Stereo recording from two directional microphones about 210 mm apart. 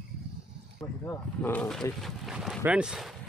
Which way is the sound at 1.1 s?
10° left (ahead or behind).